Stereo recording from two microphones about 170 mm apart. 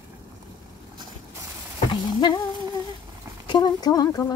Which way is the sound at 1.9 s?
25° left (ahead or behind).